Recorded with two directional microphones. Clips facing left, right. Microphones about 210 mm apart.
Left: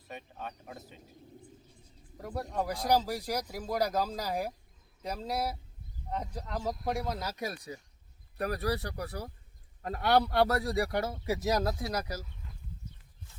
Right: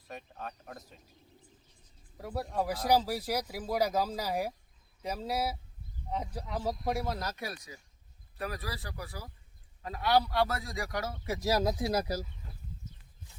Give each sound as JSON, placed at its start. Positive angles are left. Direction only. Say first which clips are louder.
{"t": 0.1, "sound": "speech", "louder": "even", "side_deg": 0}
{"t": 2.1, "sound": "speech", "louder": "right 1 dB", "side_deg": -5}
{"t": 7.3, "sound": "speech", "louder": "left 3 dB", "side_deg": 20}
{"t": 8.4, "sound": "speech", "louder": "left 7 dB", "side_deg": 40}
{"t": 9.8, "sound": "speech", "louder": "left 1 dB", "side_deg": 55}
{"t": 11.3, "sound": "speech", "louder": "right 1 dB", "side_deg": 0}
{"t": 11.8, "sound": "speech", "louder": "right 4 dB", "side_deg": -25}